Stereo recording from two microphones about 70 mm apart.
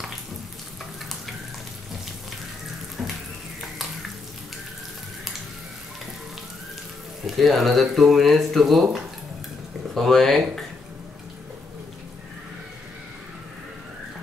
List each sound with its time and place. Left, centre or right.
3.0 s water: centre
7.2 s speech: centre
9.9 s speech: centre